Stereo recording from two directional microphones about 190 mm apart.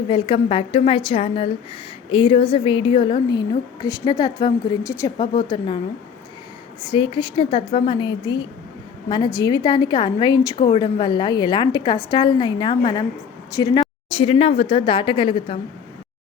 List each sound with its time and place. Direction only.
0.1 s a woman's voice: 25° left (ahead or behind)
6.8 s a woman's voice: 25° left (ahead or behind)